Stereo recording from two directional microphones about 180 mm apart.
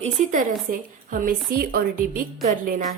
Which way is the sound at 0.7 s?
50° right (ahead or behind).